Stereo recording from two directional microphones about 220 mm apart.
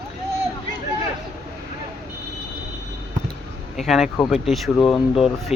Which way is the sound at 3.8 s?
Centre (ahead or behind).